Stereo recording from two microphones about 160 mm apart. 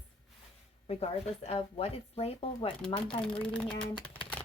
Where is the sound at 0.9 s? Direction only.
40° left (ahead or behind).